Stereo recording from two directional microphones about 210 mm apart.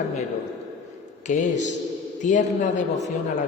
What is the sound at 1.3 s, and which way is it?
A man's voice, 35° left (ahead or behind).